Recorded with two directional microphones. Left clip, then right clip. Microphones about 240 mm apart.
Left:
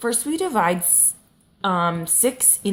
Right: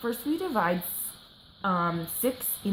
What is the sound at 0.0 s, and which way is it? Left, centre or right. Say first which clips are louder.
A woman's voice: left 7 dB; left.